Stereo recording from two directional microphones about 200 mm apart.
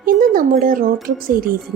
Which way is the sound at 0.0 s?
45° right (ahead or behind).